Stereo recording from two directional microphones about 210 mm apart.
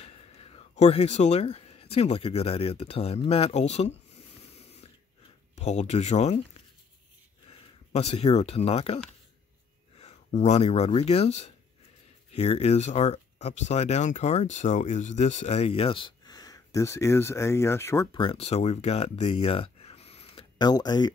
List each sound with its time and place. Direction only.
0.0 s speech: 30° left (ahead or behind)
5.6 s speech: 30° left (ahead or behind)
7.4 s speech: 30° left (ahead or behind); by 18.0 s 10° left (ahead or behind)
18.1 s speech: 25° left (ahead or behind)